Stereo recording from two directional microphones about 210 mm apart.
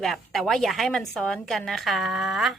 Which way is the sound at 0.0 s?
Centre (ahead or behind).